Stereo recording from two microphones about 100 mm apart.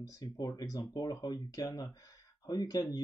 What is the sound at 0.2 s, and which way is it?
Speech, 40° left (ahead or behind).